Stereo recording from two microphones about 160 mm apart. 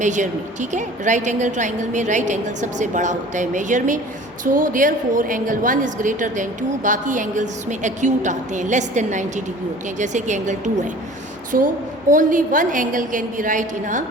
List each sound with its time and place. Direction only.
0.0 s a woman's voice: 50° right (ahead or behind)
12.1 s a woman's voice: 55° right (ahead or behind)